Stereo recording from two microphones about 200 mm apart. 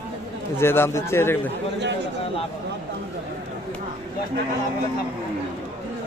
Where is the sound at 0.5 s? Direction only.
10° left (ahead or behind).